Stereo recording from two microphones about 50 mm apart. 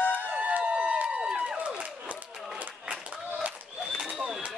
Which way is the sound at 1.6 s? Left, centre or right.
Right.